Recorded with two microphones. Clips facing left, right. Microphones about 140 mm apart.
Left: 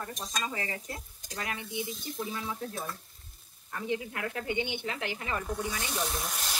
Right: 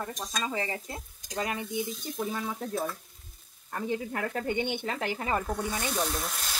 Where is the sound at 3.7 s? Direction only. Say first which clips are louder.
Right 2 dB; 45° right (ahead or behind).